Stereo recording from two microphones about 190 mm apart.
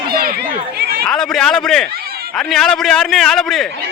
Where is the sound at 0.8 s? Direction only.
55° right (ahead or behind).